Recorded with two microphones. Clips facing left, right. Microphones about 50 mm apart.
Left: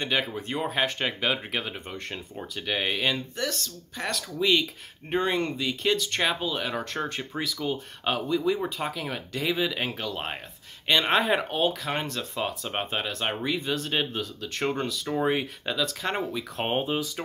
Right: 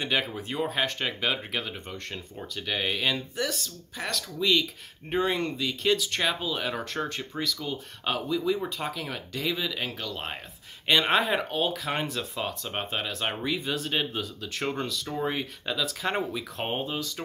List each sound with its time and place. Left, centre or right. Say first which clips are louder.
0.0 s speech: left 1 dB; centre
3.3 s speech: even; centre
4.4 s speech: left 1 dB; centre
10.9 s speech: left 1 dB; centre
15.1 s speech: left 5 dB; centre
15.7 s speech: even; centre
16.6 s speech: left 5 dB; left